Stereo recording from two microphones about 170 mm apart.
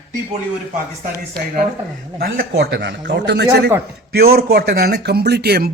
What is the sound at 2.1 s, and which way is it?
A man's voice, 60° right (ahead or behind).